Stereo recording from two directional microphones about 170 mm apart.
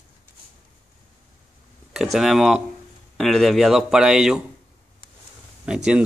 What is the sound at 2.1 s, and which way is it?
Speech, centre (ahead or behind).